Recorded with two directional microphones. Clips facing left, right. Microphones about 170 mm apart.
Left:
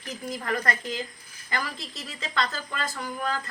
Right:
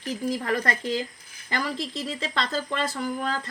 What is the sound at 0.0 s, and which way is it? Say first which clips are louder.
Speech: right 6 dB; 35° right (ahead or behind).